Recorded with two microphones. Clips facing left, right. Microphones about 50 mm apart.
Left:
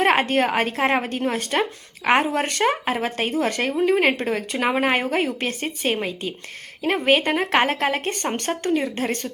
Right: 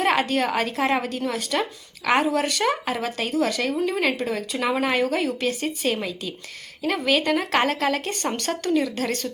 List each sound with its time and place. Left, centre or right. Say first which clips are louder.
0.0 s speech: left 3 dB; left